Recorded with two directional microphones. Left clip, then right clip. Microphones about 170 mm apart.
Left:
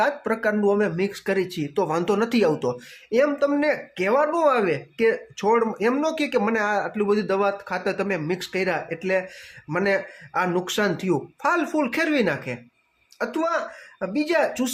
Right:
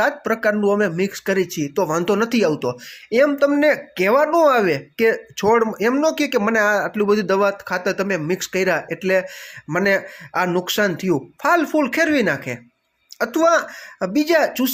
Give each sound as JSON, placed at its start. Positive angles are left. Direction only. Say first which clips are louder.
{"t": 0.0, "sound": "speech", "louder": "right 4 dB", "side_deg": -20}